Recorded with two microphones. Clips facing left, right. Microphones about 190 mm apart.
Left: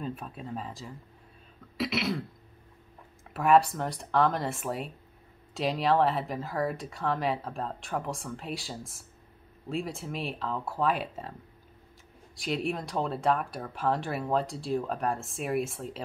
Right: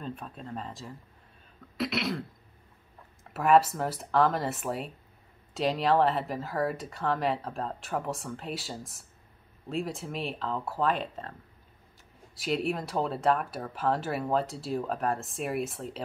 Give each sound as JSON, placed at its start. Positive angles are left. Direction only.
{"t": 0.0, "sound": "speech", "side_deg": 5}
{"t": 3.3, "sound": "speech", "side_deg": 0}
{"t": 12.4, "sound": "speech", "side_deg": 0}